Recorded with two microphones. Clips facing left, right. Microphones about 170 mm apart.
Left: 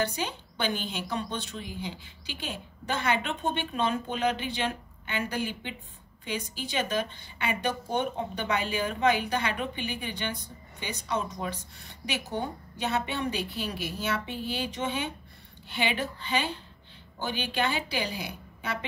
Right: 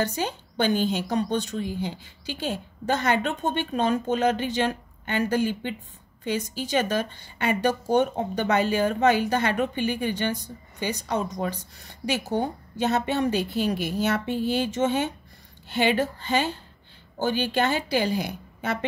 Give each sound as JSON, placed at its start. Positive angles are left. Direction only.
{"t": 0.0, "sound": "a woman's voice", "side_deg": -45}